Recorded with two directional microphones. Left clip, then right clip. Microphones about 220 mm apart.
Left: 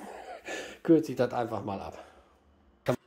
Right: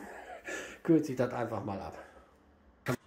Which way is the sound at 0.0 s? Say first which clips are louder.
Left 3 dB; 20° left (ahead or behind).